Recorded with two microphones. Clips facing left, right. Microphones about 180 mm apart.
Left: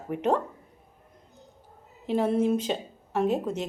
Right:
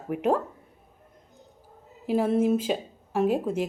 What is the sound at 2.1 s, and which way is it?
Speech, 5° right (ahead or behind).